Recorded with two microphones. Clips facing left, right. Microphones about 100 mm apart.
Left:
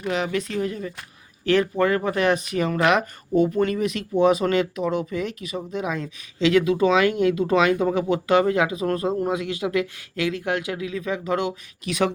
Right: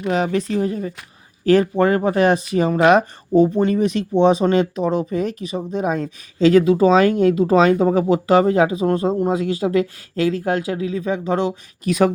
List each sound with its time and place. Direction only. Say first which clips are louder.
0.1 s speech: right 5 dB; 35° right (ahead or behind)